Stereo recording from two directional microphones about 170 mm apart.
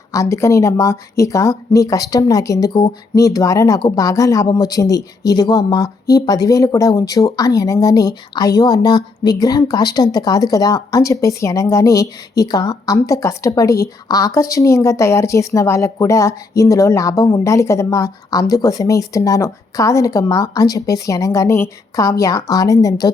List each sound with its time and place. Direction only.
0.1 s speech: 20° left (ahead or behind)